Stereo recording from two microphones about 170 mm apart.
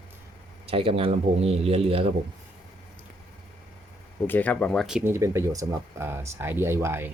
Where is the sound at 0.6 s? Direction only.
35° right (ahead or behind).